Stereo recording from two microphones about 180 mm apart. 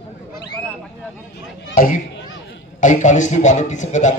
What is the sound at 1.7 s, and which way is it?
A man's voice, 50° left (ahead or behind).